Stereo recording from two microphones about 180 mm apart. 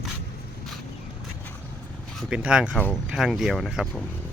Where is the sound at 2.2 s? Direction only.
5° right (ahead or behind).